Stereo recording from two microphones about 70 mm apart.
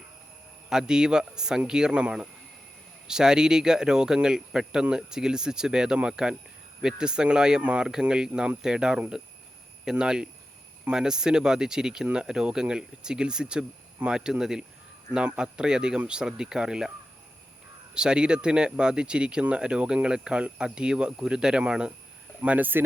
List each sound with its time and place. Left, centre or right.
0.7 s speech: centre
17.9 s speech: centre